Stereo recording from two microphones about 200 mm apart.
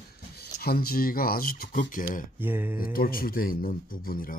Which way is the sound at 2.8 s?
45° left (ahead or behind).